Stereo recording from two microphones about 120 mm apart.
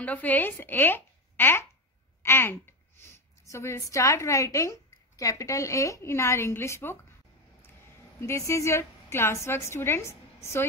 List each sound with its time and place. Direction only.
0.0 s a woman's voice: 15° left (ahead or behind)
8.2 s a woman's voice: 25° left (ahead or behind)